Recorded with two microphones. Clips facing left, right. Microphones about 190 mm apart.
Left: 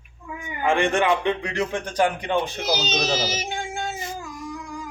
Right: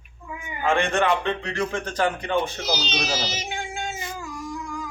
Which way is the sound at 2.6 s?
45° left (ahead or behind).